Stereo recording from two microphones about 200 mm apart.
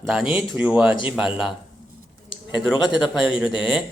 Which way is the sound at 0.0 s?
5° right (ahead or behind).